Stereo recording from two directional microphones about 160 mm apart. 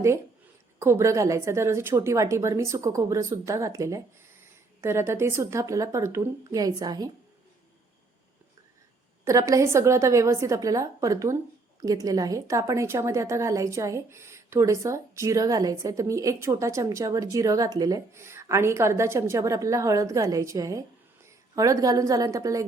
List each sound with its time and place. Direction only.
0.8 s a woman's voice: 15° right (ahead or behind)
9.2 s a woman's voice: 20° right (ahead or behind)